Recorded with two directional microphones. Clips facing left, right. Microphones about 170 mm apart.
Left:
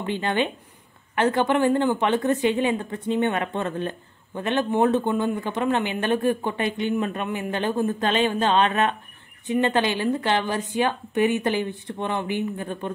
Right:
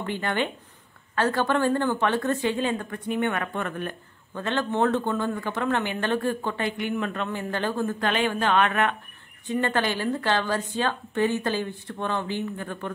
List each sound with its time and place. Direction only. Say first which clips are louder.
0.0 s a woman's voice: left 3 dB; 20° left (ahead or behind)